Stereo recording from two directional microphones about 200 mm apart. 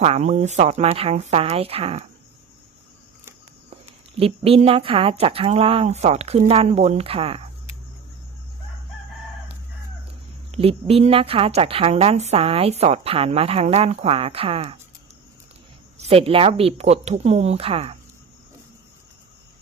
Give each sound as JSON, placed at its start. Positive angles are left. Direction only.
{"t": 0.0, "sound": "speech", "side_deg": -35}
{"t": 4.2, "sound": "a woman's voice", "side_deg": -30}
{"t": 10.5, "sound": "a woman's voice", "side_deg": -30}
{"t": 16.0, "sound": "speech", "side_deg": -30}